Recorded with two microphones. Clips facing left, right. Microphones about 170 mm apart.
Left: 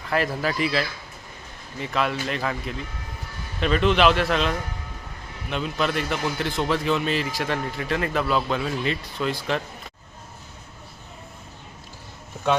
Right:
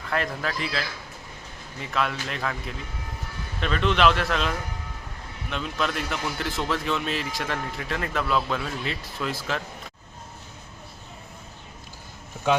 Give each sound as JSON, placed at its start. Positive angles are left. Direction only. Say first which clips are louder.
{"t": 0.1, "sound": "speech", "louder": "left 4 dB", "side_deg": 5}